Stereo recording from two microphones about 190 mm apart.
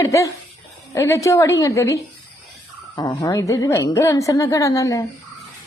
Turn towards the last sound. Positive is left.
turn(degrees=15)  # may be behind; listen again after turning